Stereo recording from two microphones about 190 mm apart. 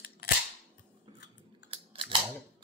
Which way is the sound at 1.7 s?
30° right (ahead or behind).